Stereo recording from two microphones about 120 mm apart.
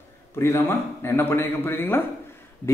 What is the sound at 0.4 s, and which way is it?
A man's voice, 20° left (ahead or behind).